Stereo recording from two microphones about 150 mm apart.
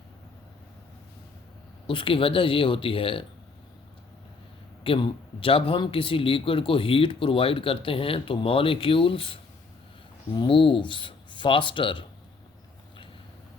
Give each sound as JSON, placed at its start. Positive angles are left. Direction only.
{"t": 1.9, "sound": "a man's voice", "side_deg": 35}
{"t": 4.8, "sound": "a man's voice", "side_deg": 35}